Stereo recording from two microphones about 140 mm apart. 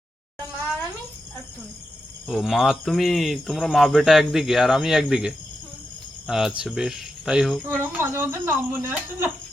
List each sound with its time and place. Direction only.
2.2 s speech: centre (ahead or behind)
7.8 s speech: 15° right (ahead or behind)